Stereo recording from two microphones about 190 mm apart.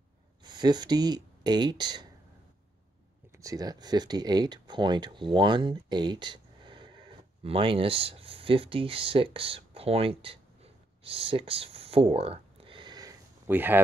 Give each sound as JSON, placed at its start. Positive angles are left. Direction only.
{"t": 0.4, "sound": "speech", "side_deg": -25}
{"t": 3.3, "sound": "speech", "side_deg": -20}
{"t": 13.5, "sound": "speech", "side_deg": -10}